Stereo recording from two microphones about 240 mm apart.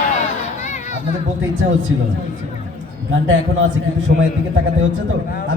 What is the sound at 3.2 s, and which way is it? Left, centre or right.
Speech, right.